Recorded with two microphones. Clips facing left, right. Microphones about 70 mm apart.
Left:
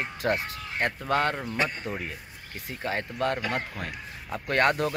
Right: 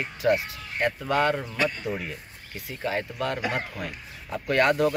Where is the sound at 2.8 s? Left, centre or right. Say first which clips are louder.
Even; left.